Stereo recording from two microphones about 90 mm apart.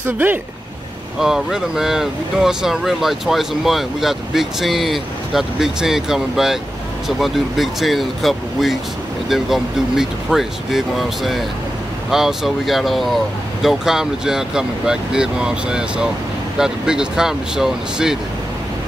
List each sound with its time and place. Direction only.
0.0 s speech: 20° right (ahead or behind)
1.2 s speech: 5° right (ahead or behind)